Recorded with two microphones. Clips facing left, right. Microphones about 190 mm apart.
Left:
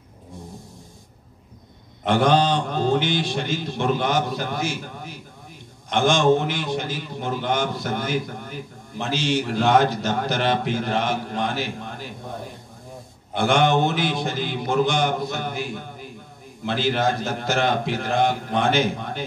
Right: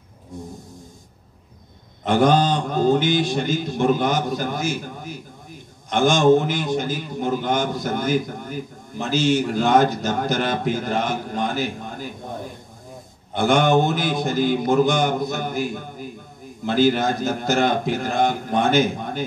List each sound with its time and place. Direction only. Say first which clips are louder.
2.0 s a man's voice: right 1 dB; 50° right (ahead or behind)
13.5 s a man's voice: right 2 dB; 45° right (ahead or behind)